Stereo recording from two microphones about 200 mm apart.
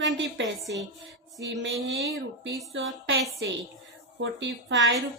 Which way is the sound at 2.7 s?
65° right (ahead or behind).